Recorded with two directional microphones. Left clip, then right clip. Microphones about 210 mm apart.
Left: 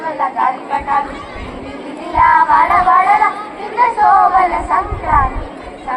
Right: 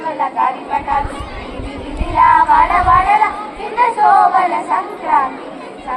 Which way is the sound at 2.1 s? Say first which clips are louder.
Even; 20° right (ahead or behind).